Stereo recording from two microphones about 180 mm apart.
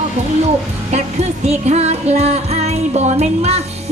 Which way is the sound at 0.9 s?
35° right (ahead or behind).